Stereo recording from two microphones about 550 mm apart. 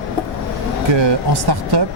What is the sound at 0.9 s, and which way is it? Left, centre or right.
Speech, right.